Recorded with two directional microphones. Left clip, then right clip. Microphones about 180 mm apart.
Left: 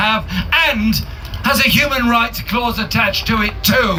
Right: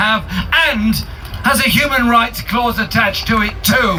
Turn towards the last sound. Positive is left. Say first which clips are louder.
# right 1 dB
turn(degrees=35)  # may be behind; listen again after turning